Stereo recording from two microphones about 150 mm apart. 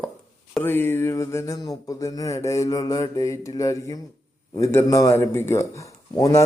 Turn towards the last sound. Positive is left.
turn(degrees=20)  # may be behind; listen again after turning